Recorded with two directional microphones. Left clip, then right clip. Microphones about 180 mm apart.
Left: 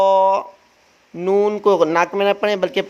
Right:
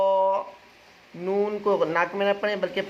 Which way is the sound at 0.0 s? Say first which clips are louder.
Left 8 dB; 55° left (ahead or behind).